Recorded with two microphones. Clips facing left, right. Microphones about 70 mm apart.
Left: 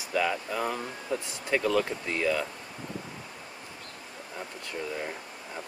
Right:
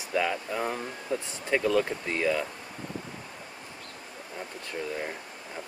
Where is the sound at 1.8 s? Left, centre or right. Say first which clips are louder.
Right 1 dB; right.